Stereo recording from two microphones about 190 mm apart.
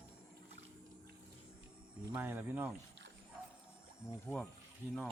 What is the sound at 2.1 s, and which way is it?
Speech, 10° right (ahead or behind).